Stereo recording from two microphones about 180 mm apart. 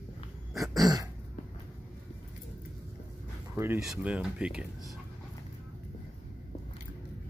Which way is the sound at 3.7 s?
5° right (ahead or behind).